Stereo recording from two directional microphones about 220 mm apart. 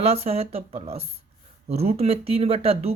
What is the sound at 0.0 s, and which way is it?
Speech, 25° right (ahead or behind).